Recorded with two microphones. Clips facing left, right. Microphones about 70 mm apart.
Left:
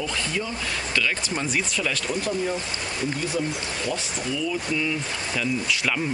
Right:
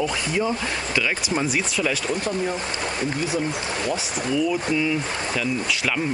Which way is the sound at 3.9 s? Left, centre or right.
Centre.